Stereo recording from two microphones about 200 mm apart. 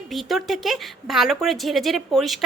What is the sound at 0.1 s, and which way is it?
A woman's voice, centre (ahead or behind).